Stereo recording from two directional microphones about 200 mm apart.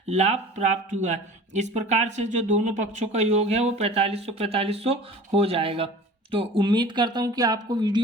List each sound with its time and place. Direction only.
0.1 s speech: 35° right (ahead or behind)